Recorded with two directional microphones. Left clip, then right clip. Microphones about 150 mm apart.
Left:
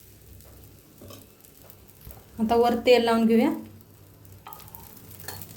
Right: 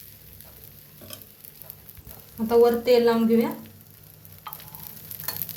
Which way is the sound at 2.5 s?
70° left (ahead or behind).